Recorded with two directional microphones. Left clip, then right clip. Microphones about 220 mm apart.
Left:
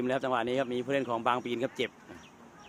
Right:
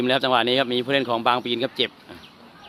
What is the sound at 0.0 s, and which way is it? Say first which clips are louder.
Speech: right 10 dB; 35° right (ahead or behind).